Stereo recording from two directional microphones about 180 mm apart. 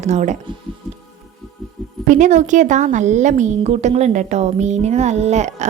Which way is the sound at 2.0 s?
45° right (ahead or behind).